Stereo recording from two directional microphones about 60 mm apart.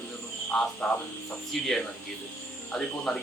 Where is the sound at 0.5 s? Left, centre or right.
Centre.